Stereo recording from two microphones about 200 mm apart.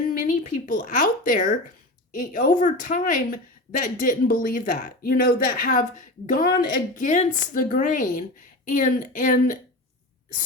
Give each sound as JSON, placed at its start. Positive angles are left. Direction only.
{"t": 0.1, "sound": "speech", "side_deg": 40}